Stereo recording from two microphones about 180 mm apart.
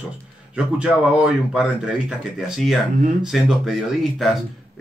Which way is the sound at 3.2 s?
Centre (ahead or behind).